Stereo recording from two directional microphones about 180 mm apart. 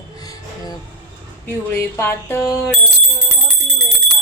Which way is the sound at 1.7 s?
15° left (ahead or behind).